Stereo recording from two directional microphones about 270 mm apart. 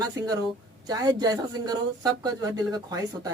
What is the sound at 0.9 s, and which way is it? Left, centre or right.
Speech, centre.